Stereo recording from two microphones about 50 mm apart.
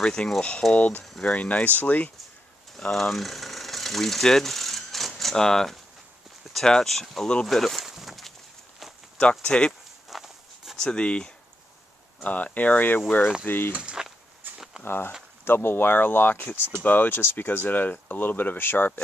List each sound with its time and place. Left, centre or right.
0.0 s speech: centre; by 2.1 s left
2.9 s speech: centre
9.2 s speech: centre
10.0 s walk: centre
10.8 s speech: centre
12.2 s speech: left
13.7 s speech: centre
14.4 s a sound: right
14.8 s speech: left